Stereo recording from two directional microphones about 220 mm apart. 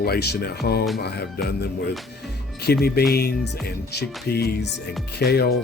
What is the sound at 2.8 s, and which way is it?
Speech, 45° left (ahead or behind).